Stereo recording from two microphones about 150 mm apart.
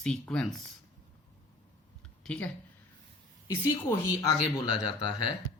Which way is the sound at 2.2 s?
5° left (ahead or behind).